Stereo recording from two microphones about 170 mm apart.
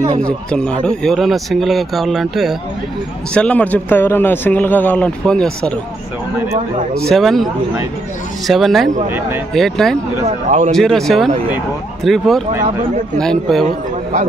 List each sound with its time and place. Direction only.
0.2 s speech: 5° left (ahead or behind)
7.1 s speech: centre (ahead or behind)
8.5 s speech: centre (ahead or behind)
10.2 s a man's voice: 45° right (ahead or behind)
10.7 s speech: centre (ahead or behind)